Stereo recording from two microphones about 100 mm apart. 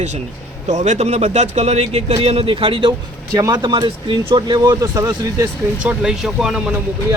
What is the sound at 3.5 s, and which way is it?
Speech, 50° right (ahead or behind).